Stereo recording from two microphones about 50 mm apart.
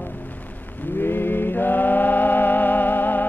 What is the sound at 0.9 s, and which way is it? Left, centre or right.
Music, left.